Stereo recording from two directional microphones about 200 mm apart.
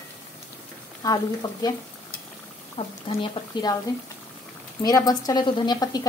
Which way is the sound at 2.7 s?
25° left (ahead or behind).